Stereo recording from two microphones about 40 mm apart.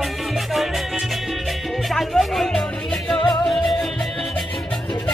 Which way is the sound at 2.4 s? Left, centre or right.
Centre.